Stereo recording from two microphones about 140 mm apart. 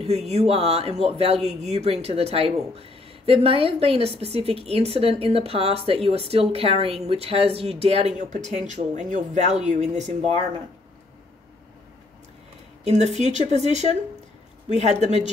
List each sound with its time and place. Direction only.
0.3 s speech: 50° right (ahead or behind)
8.2 s speech: 60° right (ahead or behind)
12.8 s speech: 50° right (ahead or behind)